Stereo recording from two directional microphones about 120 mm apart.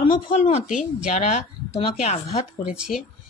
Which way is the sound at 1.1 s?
80° left.